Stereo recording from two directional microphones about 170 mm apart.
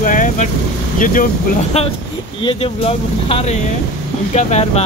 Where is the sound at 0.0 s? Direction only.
50° left (ahead or behind).